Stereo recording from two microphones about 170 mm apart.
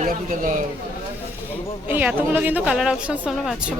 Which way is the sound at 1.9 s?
10° right (ahead or behind).